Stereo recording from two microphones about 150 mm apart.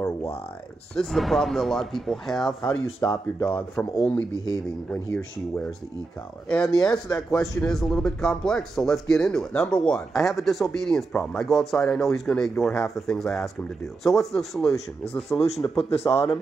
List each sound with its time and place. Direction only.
0.9 s speech: centre (ahead or behind)
2.6 s speech: 25° left (ahead or behind)
3.3 s speech: 10° left (ahead or behind)
6.5 s speech: 5° left (ahead or behind)
15.8 s speech: 40° left (ahead or behind)
16.1 s speech: 20° left (ahead or behind)